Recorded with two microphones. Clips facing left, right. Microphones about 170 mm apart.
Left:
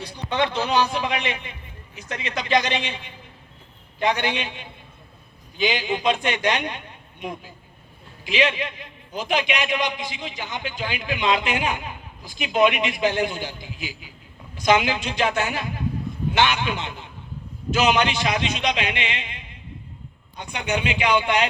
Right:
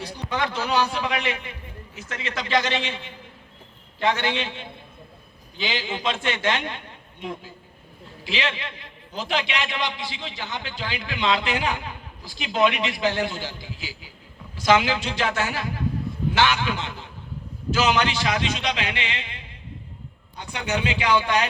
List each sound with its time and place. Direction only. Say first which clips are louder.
0.3 s a man's voice: left 3 dB; 25° left (ahead or behind)